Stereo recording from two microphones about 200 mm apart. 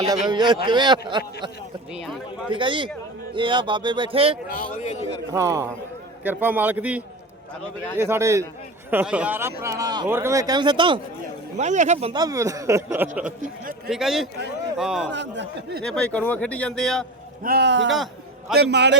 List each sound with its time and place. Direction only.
0.1 s a man's voice: 20° right (ahead or behind)
2.5 s a man's voice: 25° right (ahead or behind)
4.4 s a man's voice: 45° left (ahead or behind)
5.3 s speech: 15° right (ahead or behind)
11.5 s speech: 35° right (ahead or behind)
12.2 s speech: 15° right (ahead or behind)
13.8 s speech: centre (ahead or behind)
15.1 s speech: 60° right (ahead or behind)
15.8 s speech: 5° left (ahead or behind)
17.4 s speech: 55° right (ahead or behind)
17.9 s a sound: centre (ahead or behind)
18.5 s speech: 55° right (ahead or behind)